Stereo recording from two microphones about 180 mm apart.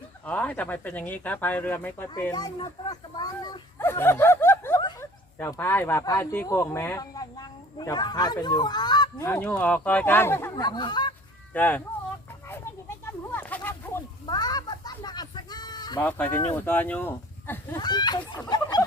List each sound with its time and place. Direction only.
0.3 s speech: 10° left (ahead or behind)
2.3 s speech: 25° left (ahead or behind)
4.8 s snicker: 25° left (ahead or behind)
5.4 s speech: 10° left (ahead or behind)
10.5 s speech: 25° left (ahead or behind)
11.5 s speech: 10° left (ahead or behind)
13.1 s a sound: 10° left (ahead or behind)
14.3 s a sound: 25° left (ahead or behind)
16.0 s speech: 10° left (ahead or behind)
17.7 s a sound: 25° left (ahead or behind)
18.3 s speech: 20° left (ahead or behind)